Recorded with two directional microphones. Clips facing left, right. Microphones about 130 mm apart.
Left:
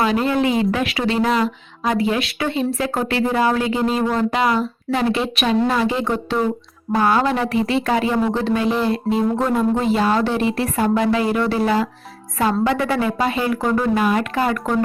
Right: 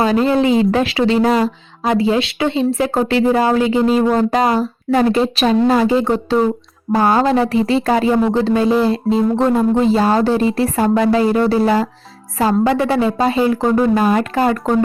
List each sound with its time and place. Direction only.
0.0 s speech: 30° right (ahead or behind)
4.1 s speech: 40° right (ahead or behind)
13.9 s speech: 40° right (ahead or behind)